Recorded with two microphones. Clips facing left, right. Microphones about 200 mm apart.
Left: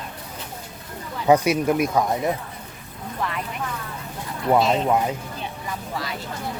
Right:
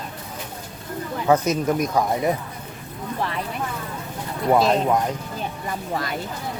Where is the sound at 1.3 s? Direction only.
10° left (ahead or behind).